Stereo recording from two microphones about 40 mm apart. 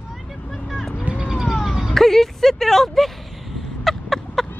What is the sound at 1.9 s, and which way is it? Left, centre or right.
Speech, centre.